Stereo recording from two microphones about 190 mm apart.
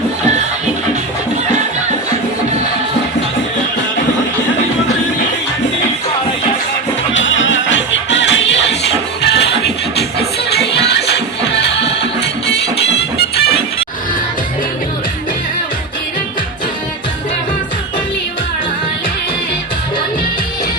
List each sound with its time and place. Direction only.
7.1 s music: 80° left; by 13.5 s 60° left (ahead or behind)